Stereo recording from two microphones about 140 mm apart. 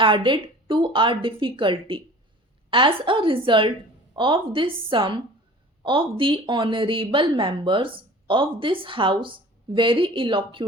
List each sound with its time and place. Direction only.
0.0 s speech: 35° right (ahead or behind)